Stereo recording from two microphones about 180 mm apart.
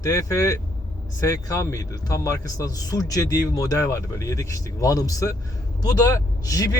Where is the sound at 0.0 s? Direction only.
20° left (ahead or behind).